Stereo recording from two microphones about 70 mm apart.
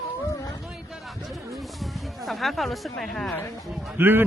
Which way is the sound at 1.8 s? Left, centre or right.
Centre.